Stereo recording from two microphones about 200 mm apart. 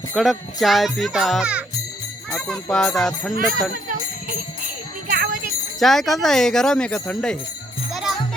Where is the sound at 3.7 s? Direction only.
45° right (ahead or behind).